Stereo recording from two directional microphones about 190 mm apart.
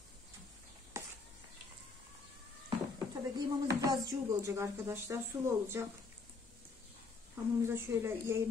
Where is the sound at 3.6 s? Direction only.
20° right (ahead or behind).